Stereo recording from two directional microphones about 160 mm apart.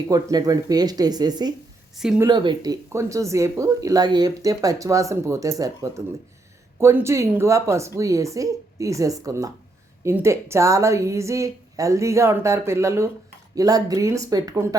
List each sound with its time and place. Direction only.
0.1 s a woman's voice: 25° right (ahead or behind)